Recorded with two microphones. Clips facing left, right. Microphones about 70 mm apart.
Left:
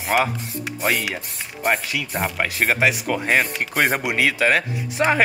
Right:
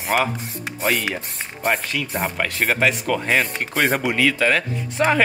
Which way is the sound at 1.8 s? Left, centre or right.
Centre.